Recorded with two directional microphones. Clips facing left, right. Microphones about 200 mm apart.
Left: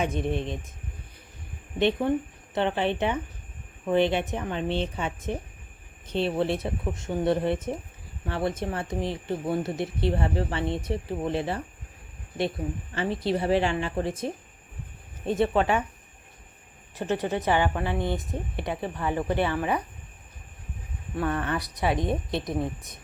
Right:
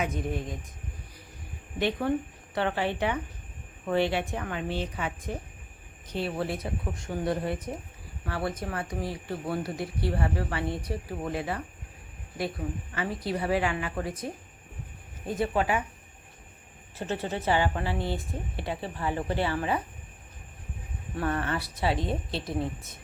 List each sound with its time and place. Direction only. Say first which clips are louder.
0.0 s speech: left 3 dB; 25° left (ahead or behind)
1.8 s speech: left 3 dB; 20° left (ahead or behind)
12.9 s speech: left 6 dB; 25° left (ahead or behind)
15.3 s speech: left 4 dB; 25° left (ahead or behind)
16.9 s speech: left 4 dB; 15° left (ahead or behind)
21.4 s speech: left 2 dB; 15° left (ahead or behind)